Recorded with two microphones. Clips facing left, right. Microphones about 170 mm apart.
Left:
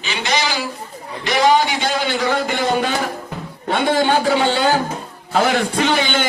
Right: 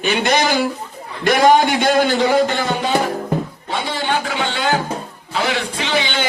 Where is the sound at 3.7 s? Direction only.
45° left (ahead or behind).